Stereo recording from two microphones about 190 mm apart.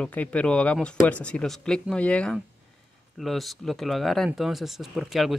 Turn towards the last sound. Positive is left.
turn(degrees=0)  # may be behind; listen again after turning